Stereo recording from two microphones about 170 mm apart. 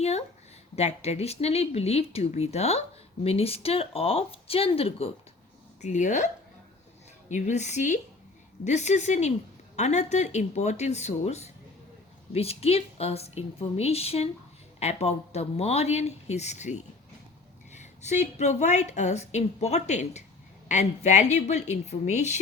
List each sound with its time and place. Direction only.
0.0 s a woman's voice: 40° left (ahead or behind)